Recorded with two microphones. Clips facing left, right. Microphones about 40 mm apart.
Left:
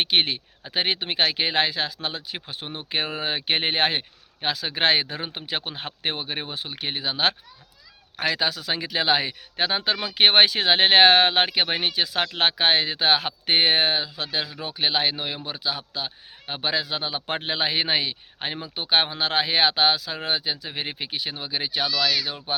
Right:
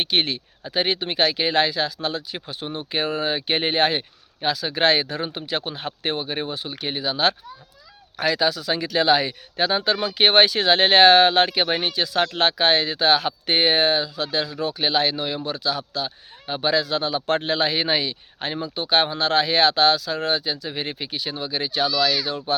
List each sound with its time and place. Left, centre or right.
0.0 s a man's voice: left
21.8 s speech: centre
22.5 s a man's voice: left